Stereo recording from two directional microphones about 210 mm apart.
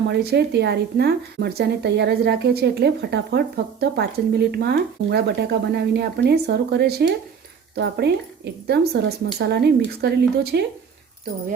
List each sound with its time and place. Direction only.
0.1 s speech: 50° right (ahead or behind)